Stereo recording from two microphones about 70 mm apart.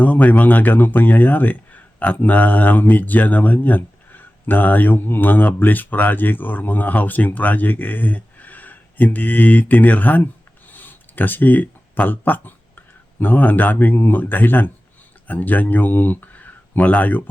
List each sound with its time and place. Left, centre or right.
0.0 s speech: left